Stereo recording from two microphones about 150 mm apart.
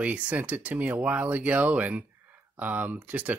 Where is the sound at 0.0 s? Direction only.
10° right (ahead or behind).